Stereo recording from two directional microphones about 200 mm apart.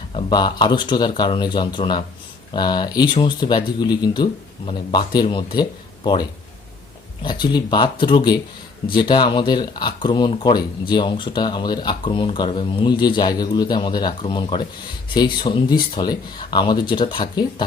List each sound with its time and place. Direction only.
0.1 s speech: 20° left (ahead or behind)